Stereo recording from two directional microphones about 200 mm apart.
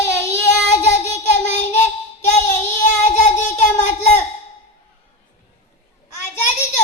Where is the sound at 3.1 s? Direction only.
35° left (ahead or behind).